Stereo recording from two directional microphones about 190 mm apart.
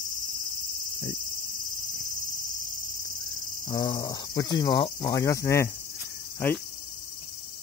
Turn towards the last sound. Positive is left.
turn(degrees=10)  # may be behind; listen again after turning